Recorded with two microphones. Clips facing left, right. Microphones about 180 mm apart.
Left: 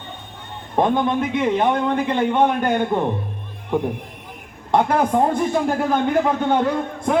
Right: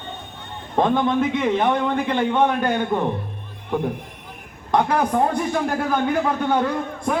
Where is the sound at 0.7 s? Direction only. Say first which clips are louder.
Even; 15° left (ahead or behind).